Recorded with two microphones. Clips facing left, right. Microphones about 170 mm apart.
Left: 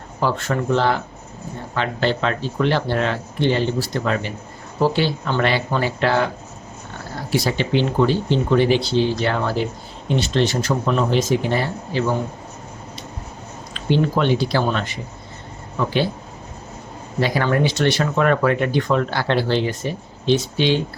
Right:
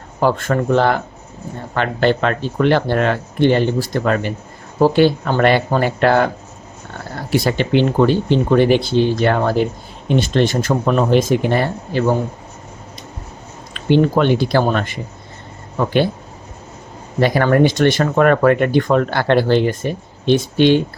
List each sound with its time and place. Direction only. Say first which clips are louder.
0.2 s speech: right 5 dB; 50° right (ahead or behind)
13.7 s speech: right 5 dB; 55° right (ahead or behind)
17.2 s speech: right 6 dB; 50° right (ahead or behind)